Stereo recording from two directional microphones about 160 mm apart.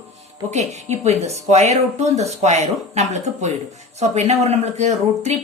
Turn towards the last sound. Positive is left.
turn(degrees=-45)  # may be behind; listen again after turning